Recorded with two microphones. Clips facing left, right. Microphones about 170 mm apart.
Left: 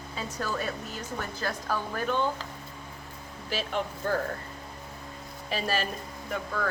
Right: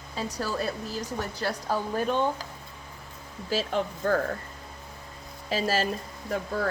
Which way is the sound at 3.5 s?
35° right (ahead or behind).